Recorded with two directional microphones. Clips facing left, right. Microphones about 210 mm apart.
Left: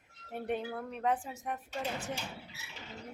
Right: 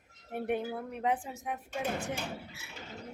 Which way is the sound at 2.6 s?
55° right (ahead or behind).